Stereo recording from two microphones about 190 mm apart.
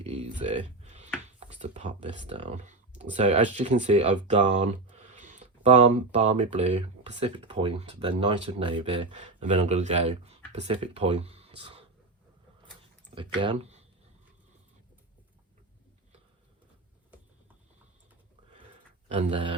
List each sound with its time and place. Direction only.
0.0 s a sound: 35° right (ahead or behind)
1.4 s speech: 35° right (ahead or behind)
13.1 s speech: 25° right (ahead or behind)
19.0 s speech: 35° right (ahead or behind)